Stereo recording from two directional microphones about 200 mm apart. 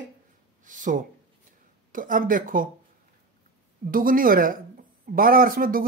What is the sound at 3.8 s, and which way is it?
Speech, 45° right (ahead or behind).